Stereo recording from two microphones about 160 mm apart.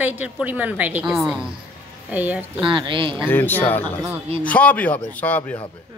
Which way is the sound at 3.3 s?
10° left (ahead or behind).